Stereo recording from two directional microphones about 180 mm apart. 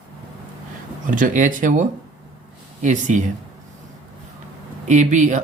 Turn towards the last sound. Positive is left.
turn(degrees=-45)  # may be behind; listen again after turning